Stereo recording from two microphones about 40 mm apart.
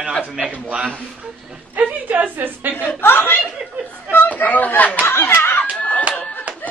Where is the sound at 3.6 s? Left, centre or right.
Right.